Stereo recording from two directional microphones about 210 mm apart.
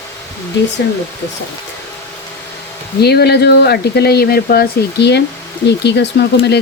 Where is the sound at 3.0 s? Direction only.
50° left (ahead or behind).